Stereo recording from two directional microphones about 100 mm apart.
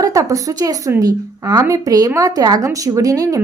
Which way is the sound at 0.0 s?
35° right (ahead or behind).